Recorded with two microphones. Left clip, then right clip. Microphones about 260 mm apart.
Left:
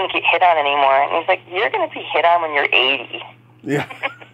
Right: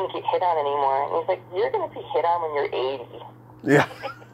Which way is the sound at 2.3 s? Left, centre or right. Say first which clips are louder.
Left 8 dB; left.